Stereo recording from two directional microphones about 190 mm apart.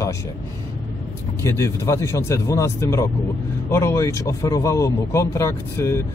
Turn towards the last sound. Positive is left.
turn(degrees=15)  # may be behind; listen again after turning